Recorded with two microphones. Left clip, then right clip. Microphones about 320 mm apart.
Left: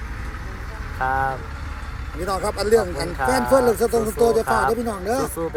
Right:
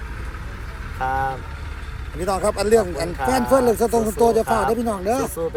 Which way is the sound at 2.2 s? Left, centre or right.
Right.